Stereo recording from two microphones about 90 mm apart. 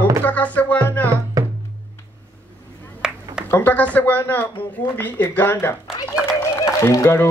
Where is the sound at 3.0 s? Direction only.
10° right (ahead or behind).